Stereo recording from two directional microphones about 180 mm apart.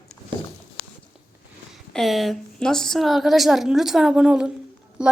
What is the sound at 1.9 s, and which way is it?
Speech, centre (ahead or behind).